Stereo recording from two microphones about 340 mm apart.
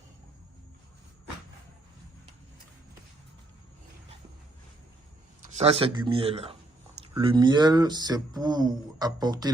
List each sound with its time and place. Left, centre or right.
5.5 s speech: centre